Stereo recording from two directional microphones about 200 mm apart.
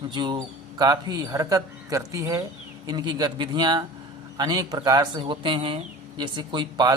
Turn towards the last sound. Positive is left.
turn(degrees=-20)  # may be behind; listen again after turning